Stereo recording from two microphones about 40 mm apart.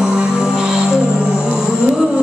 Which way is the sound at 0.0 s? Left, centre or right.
Centre.